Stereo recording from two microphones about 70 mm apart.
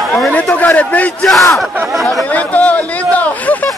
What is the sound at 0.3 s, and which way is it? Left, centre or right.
Speech, left.